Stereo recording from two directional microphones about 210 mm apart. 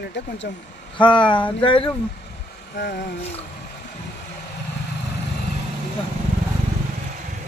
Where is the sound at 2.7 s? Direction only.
55° left (ahead or behind).